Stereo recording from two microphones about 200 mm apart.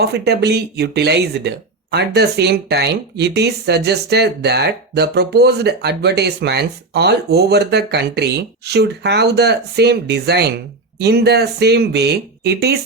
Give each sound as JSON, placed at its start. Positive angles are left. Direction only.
{"t": 0.0, "sound": "speech", "side_deg": -55}